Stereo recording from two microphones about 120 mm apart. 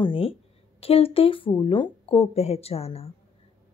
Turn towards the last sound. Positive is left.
turn(degrees=55)  # may be behind; listen again after turning